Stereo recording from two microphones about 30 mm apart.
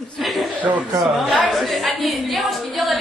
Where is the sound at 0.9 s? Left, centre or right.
Centre.